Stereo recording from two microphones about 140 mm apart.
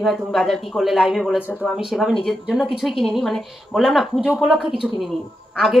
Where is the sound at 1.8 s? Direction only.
5° right (ahead or behind).